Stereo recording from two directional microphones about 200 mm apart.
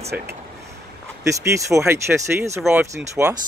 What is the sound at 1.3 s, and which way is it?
Speech, 15° right (ahead or behind).